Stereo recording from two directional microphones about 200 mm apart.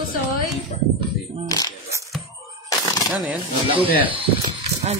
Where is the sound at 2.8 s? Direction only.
15° left (ahead or behind).